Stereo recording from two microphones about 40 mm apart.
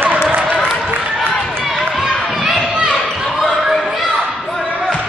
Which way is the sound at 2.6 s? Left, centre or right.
Right.